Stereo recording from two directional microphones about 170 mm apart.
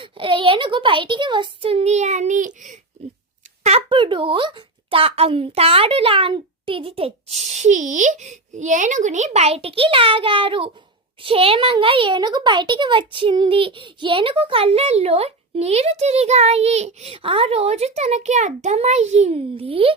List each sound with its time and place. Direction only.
0.0 s a child's voice: 30° right (ahead or behind); by 2.7 s 45° right (ahead or behind)
3.6 s a child's voice: 35° right (ahead or behind)